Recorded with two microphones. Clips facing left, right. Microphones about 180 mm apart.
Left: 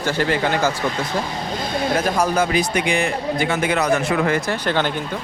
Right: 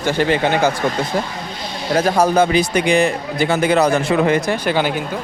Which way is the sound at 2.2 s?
30° right (ahead or behind).